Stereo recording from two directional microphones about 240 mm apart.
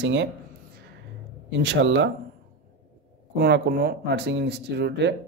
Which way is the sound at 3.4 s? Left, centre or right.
Right.